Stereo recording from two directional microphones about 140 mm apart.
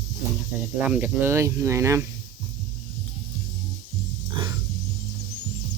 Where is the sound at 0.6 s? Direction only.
10° right (ahead or behind).